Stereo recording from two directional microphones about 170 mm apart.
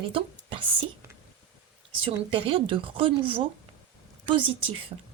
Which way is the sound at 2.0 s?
30° right (ahead or behind).